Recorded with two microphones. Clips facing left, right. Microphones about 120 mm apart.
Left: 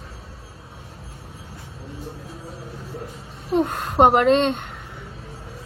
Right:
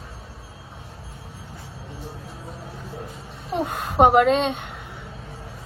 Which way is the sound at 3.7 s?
5° right (ahead or behind).